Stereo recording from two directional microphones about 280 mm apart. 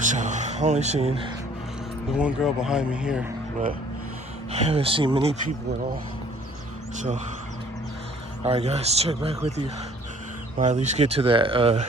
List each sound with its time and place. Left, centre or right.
0.0 s speech: right
2.1 s speech: centre
4.5 s speech: right
6.9 s speech: right
8.4 s speech: right